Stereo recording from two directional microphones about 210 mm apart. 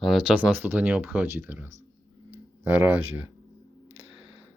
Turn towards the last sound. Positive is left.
turn(degrees=-5)  # may be behind; listen again after turning